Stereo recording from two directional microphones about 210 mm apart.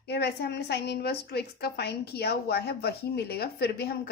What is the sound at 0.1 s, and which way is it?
A woman's voice, 50° left (ahead or behind).